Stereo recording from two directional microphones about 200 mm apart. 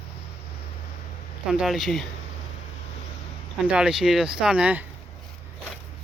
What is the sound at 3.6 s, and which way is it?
Speech, 5° right (ahead or behind).